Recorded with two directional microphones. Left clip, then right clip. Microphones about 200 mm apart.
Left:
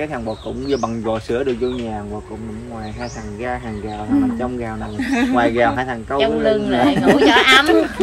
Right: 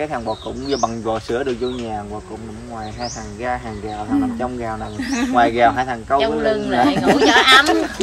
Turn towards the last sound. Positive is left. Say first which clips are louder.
# even
turn(degrees=-10)  # may be behind; listen again after turning